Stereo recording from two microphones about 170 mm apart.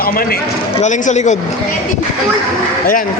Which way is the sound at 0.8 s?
45° left (ahead or behind).